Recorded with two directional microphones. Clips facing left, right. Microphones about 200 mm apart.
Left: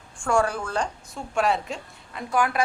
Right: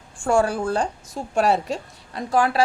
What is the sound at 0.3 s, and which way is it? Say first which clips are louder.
A woman's voice: right 4 dB; 30° right (ahead or behind).